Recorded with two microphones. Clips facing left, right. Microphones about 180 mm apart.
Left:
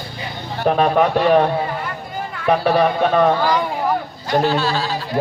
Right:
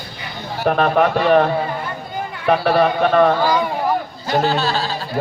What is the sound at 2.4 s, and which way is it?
A man's voice, 5° right (ahead or behind).